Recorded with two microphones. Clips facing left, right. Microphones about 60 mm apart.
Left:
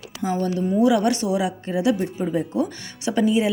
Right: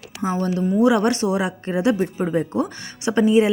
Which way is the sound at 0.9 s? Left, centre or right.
Right.